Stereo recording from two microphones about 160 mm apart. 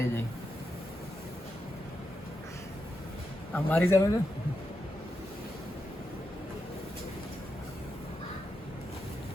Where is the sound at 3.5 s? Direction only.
10° left (ahead or behind).